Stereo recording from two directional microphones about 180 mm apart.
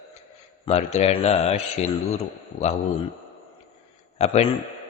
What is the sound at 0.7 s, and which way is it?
Speech, 35° left (ahead or behind).